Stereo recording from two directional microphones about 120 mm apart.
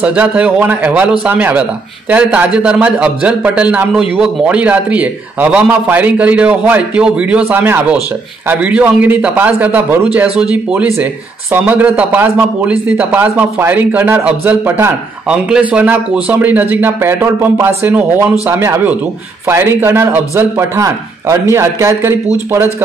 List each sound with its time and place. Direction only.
0.0 s a man's voice: 10° right (ahead or behind)